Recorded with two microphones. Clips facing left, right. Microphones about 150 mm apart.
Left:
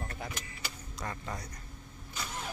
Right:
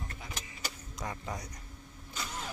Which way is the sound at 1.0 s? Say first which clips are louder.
Right 1 dB; 15° right (ahead or behind).